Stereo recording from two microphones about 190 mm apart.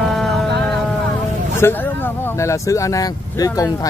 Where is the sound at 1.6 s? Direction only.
15° left (ahead or behind).